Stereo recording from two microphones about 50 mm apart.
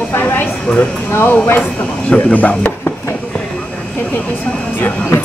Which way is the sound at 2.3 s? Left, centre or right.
Left.